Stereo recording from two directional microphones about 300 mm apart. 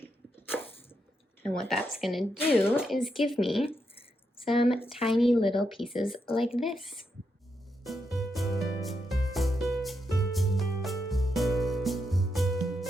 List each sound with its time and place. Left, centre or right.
1.4 s speech: centre
5.9 s speech: centre
6.4 s speech: centre
7.9 s music: centre